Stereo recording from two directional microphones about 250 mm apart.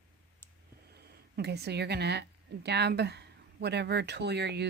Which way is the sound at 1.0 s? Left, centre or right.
Right.